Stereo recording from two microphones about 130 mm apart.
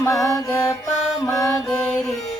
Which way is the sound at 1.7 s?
5° left (ahead or behind).